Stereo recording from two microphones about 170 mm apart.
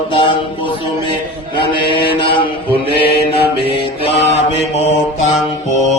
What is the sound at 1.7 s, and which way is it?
Mantra, 30° left (ahead or behind).